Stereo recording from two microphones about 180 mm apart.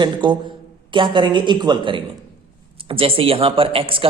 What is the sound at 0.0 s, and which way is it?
A man's voice, 25° right (ahead or behind).